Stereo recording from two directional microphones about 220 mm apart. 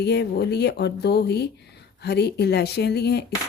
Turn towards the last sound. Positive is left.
turn(degrees=45)  # may be behind; listen again after turning